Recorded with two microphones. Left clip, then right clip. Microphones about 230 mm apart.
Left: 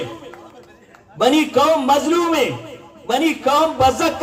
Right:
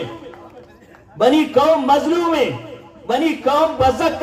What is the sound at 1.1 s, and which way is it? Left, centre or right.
A man's voice, left.